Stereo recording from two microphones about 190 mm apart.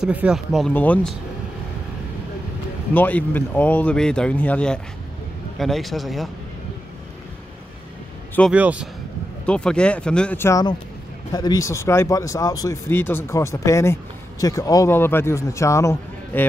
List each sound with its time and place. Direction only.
0.0 s speech: 5° right (ahead or behind)
2.9 s speech: 10° left (ahead or behind)
8.4 s speech: 5° right (ahead or behind)
9.5 s speech: 5° left (ahead or behind)